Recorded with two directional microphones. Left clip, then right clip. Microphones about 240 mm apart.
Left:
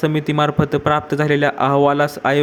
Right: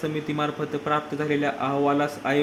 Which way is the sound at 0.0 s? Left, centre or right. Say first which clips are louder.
Left 9 dB; left.